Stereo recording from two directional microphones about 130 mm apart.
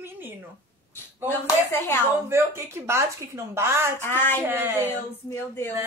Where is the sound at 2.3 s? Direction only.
20° right (ahead or behind).